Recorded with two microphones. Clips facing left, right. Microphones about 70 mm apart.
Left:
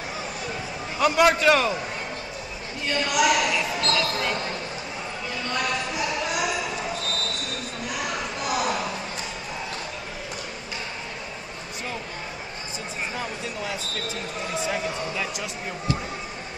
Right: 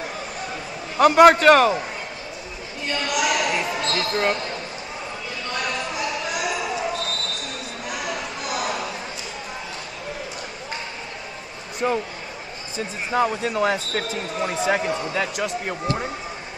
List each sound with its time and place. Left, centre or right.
0.9 s speech: right
2.9 s speech: centre
3.9 s speech: right
5.8 s a sound: centre
6.9 s basketball bounce: right
7.3 s basketball bounce: centre
13.1 s speech: right